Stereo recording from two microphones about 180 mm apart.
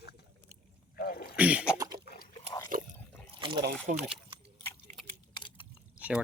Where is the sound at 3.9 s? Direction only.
45° right (ahead or behind).